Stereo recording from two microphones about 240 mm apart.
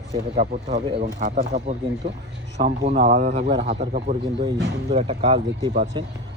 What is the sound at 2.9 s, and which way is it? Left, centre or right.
Speech, right.